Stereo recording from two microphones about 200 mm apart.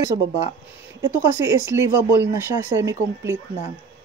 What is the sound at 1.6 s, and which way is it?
Speech, 10° right (ahead or behind).